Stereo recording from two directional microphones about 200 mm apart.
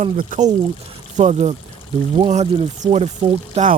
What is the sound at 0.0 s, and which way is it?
Speech, 40° right (ahead or behind).